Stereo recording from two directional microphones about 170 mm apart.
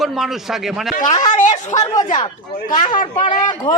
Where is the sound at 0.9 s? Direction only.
45° left (ahead or behind).